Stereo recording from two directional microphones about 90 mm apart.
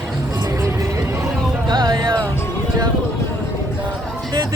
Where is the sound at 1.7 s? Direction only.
55° right (ahead or behind).